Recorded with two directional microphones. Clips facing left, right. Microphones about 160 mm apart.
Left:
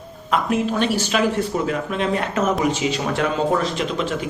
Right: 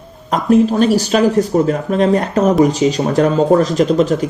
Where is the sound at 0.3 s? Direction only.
40° right (ahead or behind).